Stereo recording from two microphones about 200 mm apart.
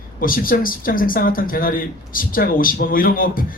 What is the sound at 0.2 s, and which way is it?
Speech, 45° left (ahead or behind).